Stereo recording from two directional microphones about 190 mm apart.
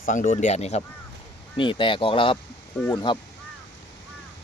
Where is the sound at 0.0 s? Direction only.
45° left (ahead or behind); by 3.2 s 25° left (ahead or behind).